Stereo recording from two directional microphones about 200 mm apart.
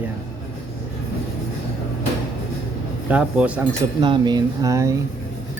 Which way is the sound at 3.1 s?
5° right (ahead or behind).